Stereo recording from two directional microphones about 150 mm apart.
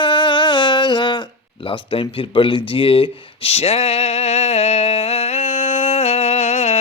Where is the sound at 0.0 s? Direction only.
30° left (ahead or behind).